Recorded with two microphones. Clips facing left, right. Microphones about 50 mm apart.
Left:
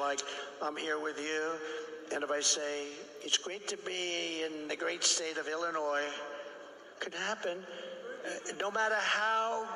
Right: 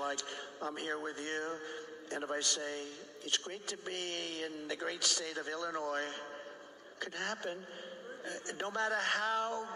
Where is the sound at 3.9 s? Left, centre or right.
Left.